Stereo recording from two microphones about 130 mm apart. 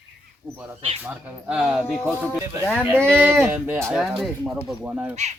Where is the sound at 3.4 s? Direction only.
15° right (ahead or behind).